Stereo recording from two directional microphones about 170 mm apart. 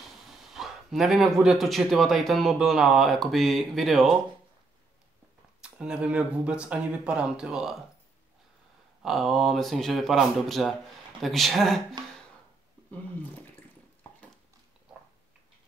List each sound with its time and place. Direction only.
0.1 s speech: centre (ahead or behind)
5.6 s speech: 5° right (ahead or behind)
9.0 s speech: centre (ahead or behind)